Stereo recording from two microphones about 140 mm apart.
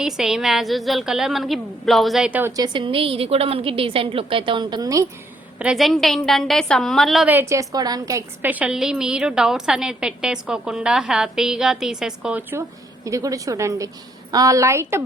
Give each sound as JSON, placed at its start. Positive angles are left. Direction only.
{"t": 0.0, "sound": "a woman's voice", "side_deg": -5}
{"t": 2.6, "sound": "a woman's voice", "side_deg": -35}
{"t": 5.5, "sound": "a woman's voice", "side_deg": -5}
{"t": 7.3, "sound": "a woman's voice", "side_deg": -15}
{"t": 8.4, "sound": "a woman's voice", "side_deg": -10}
{"t": 13.1, "sound": "a woman's voice", "side_deg": -25}